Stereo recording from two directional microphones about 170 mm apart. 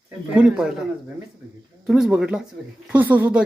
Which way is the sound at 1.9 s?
5° right (ahead or behind).